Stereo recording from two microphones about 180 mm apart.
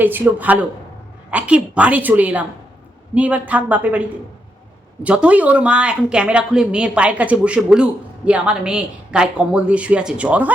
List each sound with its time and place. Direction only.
0.0 s a woman's voice: 10° right (ahead or behind)
5.0 s speech: 5° right (ahead or behind)